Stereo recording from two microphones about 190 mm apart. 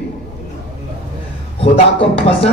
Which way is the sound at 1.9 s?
30° left (ahead or behind).